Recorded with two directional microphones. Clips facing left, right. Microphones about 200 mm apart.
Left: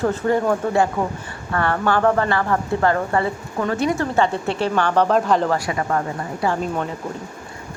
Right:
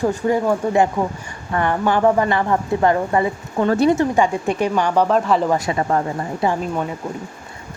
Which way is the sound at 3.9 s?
15° right (ahead or behind).